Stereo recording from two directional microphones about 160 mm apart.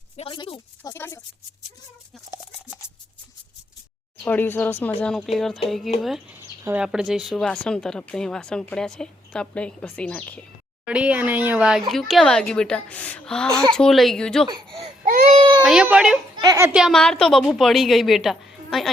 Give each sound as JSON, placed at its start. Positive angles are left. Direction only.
{"t": 0.2, "sound": "speech", "side_deg": 30}
{"t": 0.9, "sound": "speech", "side_deg": 15}
{"t": 4.2, "sound": "speech", "side_deg": 10}
{"t": 10.8, "sound": "speech", "side_deg": -5}
{"t": 14.5, "sound": "speech", "side_deg": -35}
{"t": 15.6, "sound": "speech", "side_deg": -5}
{"t": 16.4, "sound": "a child's voice", "side_deg": -25}
{"t": 16.6, "sound": "speech", "side_deg": -5}